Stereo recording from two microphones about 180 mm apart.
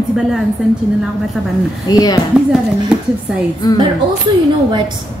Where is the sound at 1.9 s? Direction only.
20° left (ahead or behind).